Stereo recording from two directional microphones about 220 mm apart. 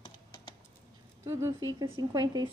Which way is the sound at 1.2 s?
15° right (ahead or behind).